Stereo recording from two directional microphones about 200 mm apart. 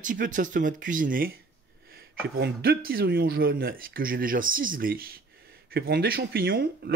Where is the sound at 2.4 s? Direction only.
50° right (ahead or behind).